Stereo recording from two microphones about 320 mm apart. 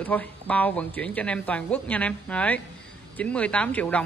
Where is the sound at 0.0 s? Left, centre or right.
Centre.